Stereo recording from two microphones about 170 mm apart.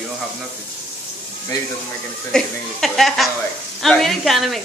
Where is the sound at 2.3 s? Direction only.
Centre (ahead or behind).